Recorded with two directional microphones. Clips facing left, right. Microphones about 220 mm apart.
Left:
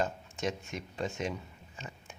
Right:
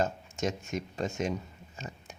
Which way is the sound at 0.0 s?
45° right (ahead or behind).